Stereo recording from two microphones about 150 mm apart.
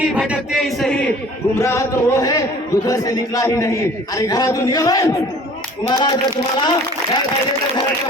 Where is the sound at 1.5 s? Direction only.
20° left (ahead or behind).